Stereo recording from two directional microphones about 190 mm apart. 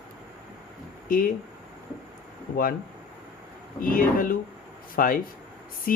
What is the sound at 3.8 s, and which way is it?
Speech, 50° left (ahead or behind).